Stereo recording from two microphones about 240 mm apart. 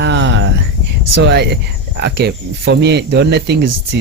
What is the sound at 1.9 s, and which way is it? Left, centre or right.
Speech, right.